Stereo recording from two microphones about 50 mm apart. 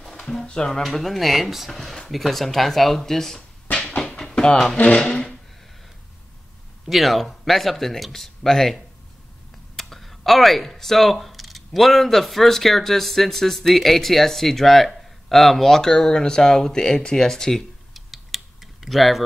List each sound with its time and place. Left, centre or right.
0.2 s speech: centre
0.8 s speech: centre
3.7 s music: left
4.0 s a sound: centre
4.8 s speech: centre
6.9 s speech: centre
17.9 s typing: centre